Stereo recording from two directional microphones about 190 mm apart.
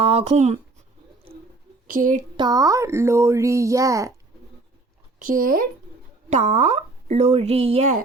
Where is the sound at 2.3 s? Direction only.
20° right (ahead or behind).